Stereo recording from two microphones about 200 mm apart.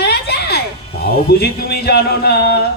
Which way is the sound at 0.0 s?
55° left (ahead or behind).